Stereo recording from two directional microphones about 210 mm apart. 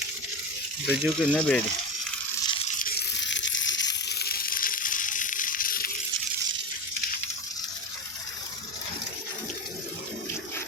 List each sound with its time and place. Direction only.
0.9 s speech: centre (ahead or behind)
2.5 s tearing: 30° left (ahead or behind)
3.2 s a sound: 60° left (ahead or behind); by 6.0 s 45° left (ahead or behind)